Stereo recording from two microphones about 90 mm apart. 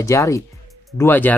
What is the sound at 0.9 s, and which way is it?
Speech, 20° left (ahead or behind).